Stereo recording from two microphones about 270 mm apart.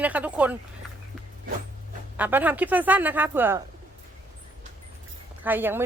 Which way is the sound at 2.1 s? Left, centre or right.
Centre.